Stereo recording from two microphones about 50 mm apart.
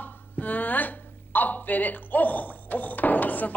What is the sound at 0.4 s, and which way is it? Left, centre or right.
Speech, left.